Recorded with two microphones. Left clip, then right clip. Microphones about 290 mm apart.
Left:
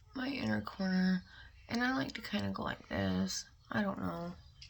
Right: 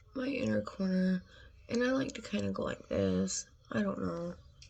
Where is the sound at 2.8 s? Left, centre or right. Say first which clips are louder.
Right 8 dB; left.